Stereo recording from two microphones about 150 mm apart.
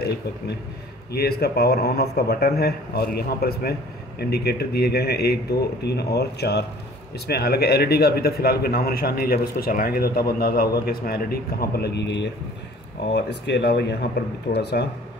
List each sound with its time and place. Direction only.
1.1 s a man's voice: 90° left
13.7 s a man's voice: 90° left